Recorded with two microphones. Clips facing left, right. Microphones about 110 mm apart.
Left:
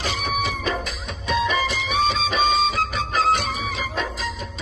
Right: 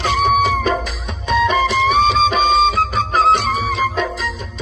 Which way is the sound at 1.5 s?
70° right (ahead or behind).